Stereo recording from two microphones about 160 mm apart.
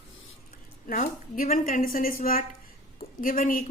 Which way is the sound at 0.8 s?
60° left (ahead or behind).